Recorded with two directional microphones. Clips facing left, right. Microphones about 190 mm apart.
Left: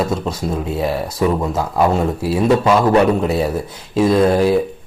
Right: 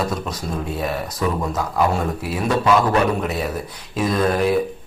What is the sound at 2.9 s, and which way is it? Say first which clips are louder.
A man's voice: left 6 dB; 30° left (ahead or behind).